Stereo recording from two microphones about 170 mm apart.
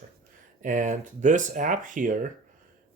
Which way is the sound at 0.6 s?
50° right (ahead or behind).